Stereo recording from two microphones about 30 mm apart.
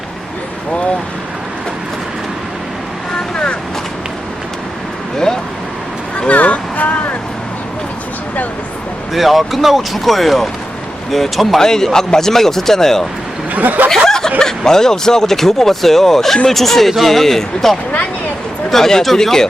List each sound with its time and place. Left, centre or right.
3.3 s vehicle: left
6.3 s vehicle: left
9.1 s speech: centre
11.6 s speech: centre
13.5 s speech: right
14.1 s speech: centre